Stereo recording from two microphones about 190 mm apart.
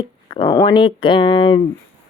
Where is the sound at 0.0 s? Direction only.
25° left (ahead or behind).